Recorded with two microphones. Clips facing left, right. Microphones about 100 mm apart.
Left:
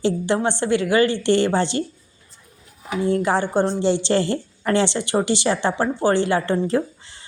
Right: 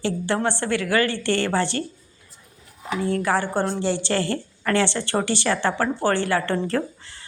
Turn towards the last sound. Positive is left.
turn(degrees=20)  # may be behind; listen again after turning